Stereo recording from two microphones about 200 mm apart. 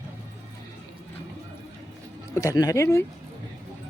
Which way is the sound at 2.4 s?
15° left (ahead or behind).